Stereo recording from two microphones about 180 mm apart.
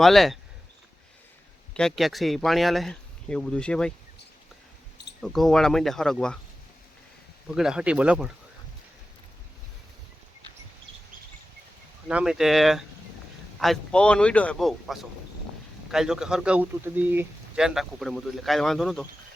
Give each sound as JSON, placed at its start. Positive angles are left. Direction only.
{"t": 0.0, "sound": "speech", "side_deg": 0}
{"t": 1.7, "sound": "speech", "side_deg": 0}
{"t": 5.2, "sound": "speech", "side_deg": 0}
{"t": 7.5, "sound": "speech", "side_deg": -5}
{"t": 12.0, "sound": "speech", "side_deg": -5}